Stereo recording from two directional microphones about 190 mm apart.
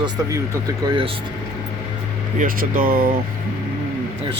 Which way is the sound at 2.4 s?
45° right (ahead or behind).